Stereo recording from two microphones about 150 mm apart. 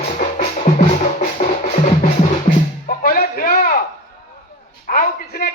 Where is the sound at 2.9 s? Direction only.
75° left (ahead or behind).